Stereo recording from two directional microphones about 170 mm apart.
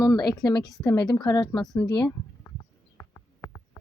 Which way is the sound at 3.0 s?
15° left (ahead or behind).